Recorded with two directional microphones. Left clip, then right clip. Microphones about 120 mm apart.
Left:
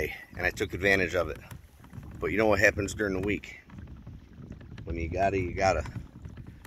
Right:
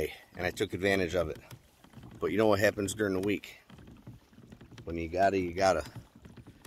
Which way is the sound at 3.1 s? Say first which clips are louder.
Left 1 dB; 25° right (ahead or behind).